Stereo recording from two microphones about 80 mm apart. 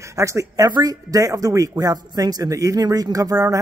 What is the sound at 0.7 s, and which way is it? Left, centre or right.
Speech, right.